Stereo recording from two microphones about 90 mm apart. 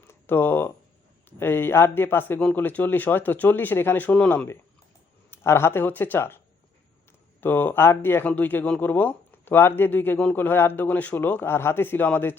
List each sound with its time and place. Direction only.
0.0 s a sound: 25° left (ahead or behind)
1.4 s speech: 25° left (ahead or behind)
5.3 s speech: 30° left (ahead or behind)
7.4 s speech: 25° left (ahead or behind)